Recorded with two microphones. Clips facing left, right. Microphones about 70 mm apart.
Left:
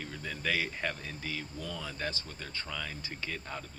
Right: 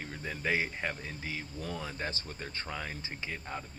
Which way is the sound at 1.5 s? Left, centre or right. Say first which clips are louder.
Right 1 dB; right.